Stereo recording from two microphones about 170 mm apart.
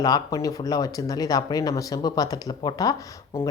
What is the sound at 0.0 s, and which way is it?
Speech, 20° left (ahead or behind).